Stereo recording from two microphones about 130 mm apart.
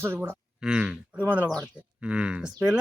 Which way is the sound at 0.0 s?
15° right (ahead or behind).